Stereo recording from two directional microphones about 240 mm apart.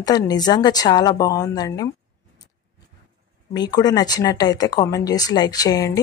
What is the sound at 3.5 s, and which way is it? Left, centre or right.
Speech, centre.